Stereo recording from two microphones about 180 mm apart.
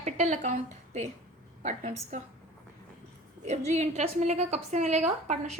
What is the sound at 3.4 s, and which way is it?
A woman's voice, 40° right (ahead or behind).